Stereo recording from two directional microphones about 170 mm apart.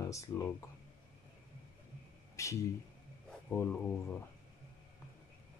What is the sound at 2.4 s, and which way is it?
Speech, 15° left (ahead or behind).